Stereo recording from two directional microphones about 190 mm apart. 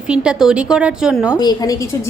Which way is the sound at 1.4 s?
20° left (ahead or behind).